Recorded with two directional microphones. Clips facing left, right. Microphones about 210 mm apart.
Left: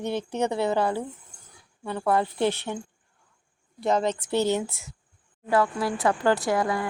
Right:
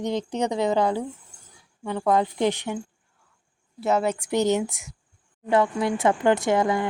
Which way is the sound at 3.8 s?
5° right (ahead or behind).